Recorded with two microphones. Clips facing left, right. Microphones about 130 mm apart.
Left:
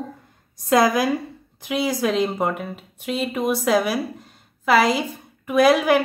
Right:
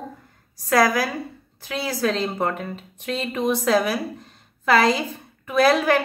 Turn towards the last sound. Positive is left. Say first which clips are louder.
# left 2 dB
turn(degrees=10)  # may be behind; listen again after turning